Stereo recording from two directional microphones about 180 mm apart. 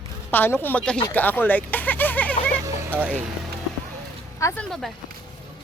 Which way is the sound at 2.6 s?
10° right (ahead or behind).